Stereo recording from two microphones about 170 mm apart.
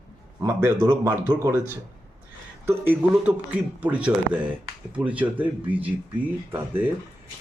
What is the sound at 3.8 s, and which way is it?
Speech, 5° right (ahead or behind).